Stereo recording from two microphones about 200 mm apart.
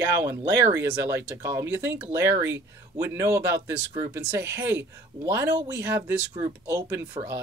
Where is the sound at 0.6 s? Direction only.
15° right (ahead or behind).